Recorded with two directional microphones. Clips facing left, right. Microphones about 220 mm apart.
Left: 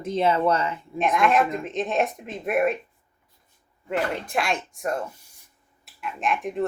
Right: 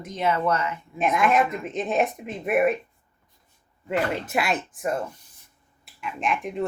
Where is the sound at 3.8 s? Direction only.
5° right (ahead or behind).